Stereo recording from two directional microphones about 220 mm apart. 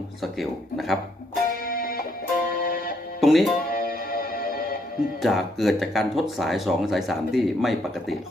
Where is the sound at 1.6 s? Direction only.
40° left (ahead or behind).